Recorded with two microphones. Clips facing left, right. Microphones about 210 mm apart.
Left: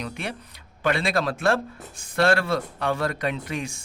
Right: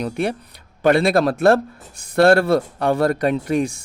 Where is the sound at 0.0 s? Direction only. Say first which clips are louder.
Right 10 dB; 35° right (ahead or behind).